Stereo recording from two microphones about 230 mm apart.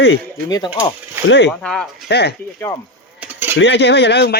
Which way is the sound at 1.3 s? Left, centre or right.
Left.